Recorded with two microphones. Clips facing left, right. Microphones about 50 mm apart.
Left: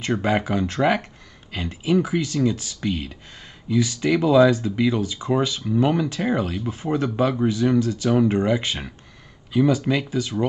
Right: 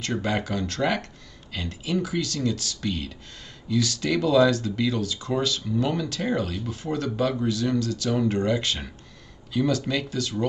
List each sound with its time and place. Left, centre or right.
0.0 s speech: left